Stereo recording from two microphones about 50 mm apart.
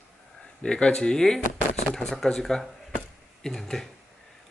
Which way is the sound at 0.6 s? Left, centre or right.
Centre.